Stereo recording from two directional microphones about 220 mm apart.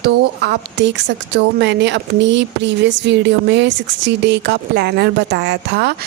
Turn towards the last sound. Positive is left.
turn(degrees=-50)  # may be behind; listen again after turning